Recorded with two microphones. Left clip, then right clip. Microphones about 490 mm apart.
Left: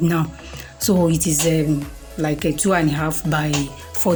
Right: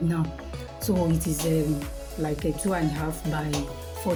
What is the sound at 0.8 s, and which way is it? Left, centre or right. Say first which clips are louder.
Speech: left 8 dB; right.